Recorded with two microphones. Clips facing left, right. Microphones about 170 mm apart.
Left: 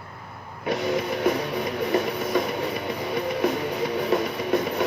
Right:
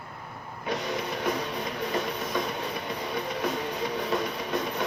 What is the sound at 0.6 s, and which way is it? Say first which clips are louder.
Music: left 6 dB; 65° left (ahead or behind).